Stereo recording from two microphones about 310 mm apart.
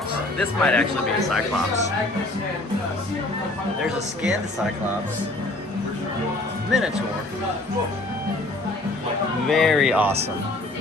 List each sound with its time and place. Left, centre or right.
0.3 s speech: centre
3.8 s speech: centre
6.7 s speech: centre
9.5 s speech: centre